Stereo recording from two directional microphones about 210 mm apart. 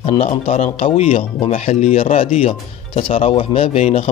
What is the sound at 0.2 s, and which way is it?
Speech, 30° left (ahead or behind).